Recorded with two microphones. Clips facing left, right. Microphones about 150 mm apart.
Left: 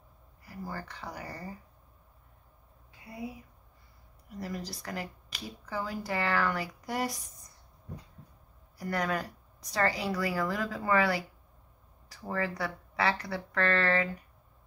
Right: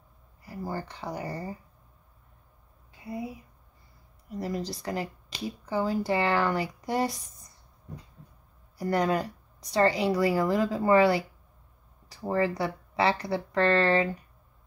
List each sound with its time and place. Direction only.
0.5 s speech: 25° right (ahead or behind)
4.4 s speech: 25° right (ahead or behind)
8.7 s speech: 25° right (ahead or behind)